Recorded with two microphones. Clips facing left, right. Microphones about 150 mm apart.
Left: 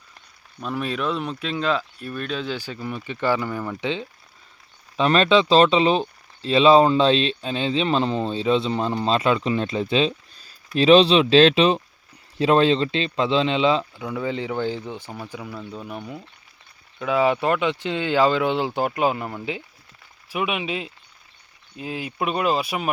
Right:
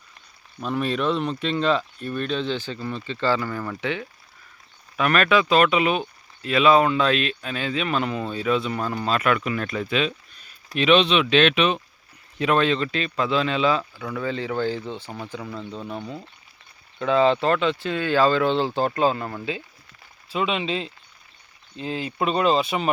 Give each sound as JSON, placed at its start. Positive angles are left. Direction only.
{"t": 0.6, "sound": "speech", "side_deg": 0}
{"t": 9.9, "sound": "a sound", "side_deg": 30}
{"t": 10.8, "sound": "speech", "side_deg": 35}